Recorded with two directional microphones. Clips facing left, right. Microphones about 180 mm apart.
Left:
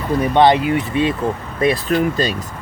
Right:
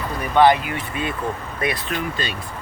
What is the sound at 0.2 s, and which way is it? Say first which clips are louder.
Speech: left 2 dB; 25° left (ahead or behind).